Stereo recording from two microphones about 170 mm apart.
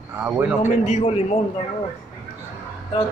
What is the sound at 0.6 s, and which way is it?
Speech, 45° left (ahead or behind).